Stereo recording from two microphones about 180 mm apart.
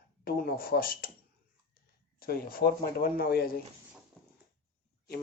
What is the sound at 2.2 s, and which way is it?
Speech, 55° left (ahead or behind).